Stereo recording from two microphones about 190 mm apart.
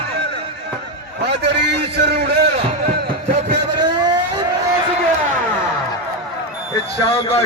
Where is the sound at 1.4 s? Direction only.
65° right (ahead or behind).